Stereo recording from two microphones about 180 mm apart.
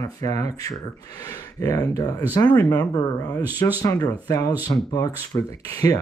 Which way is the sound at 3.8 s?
20° left (ahead or behind).